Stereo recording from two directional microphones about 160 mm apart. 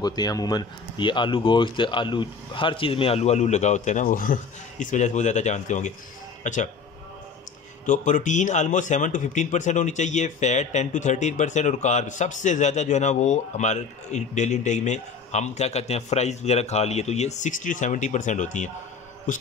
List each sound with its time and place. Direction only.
0.0 s a man's voice: 25° left (ahead or behind); by 6.7 s 50° left (ahead or behind)
7.8 s a man's voice: 50° left (ahead or behind)